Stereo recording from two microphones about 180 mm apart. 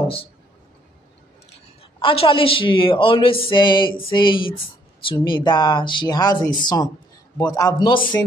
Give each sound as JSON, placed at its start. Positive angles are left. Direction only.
{"t": 2.0, "sound": "speech", "side_deg": 30}